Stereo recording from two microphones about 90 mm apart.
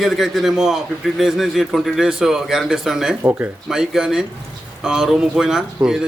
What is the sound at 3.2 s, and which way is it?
Speech, 15° right (ahead or behind).